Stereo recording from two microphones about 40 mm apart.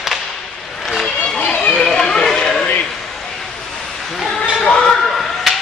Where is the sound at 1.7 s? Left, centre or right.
Centre.